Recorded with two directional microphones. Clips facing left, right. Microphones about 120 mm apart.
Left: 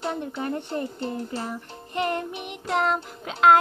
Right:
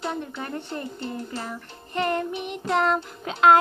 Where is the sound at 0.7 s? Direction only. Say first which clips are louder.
Left 3 dB; 35° left (ahead or behind).